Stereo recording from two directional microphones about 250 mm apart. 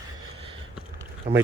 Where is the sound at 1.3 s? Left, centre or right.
Right.